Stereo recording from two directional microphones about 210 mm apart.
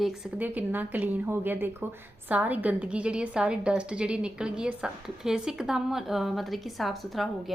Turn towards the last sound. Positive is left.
turn(degrees=0)  # may be behind; listen again after turning